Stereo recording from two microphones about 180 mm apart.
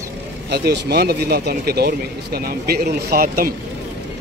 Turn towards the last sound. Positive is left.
turn(degrees=-55)  # may be behind; listen again after turning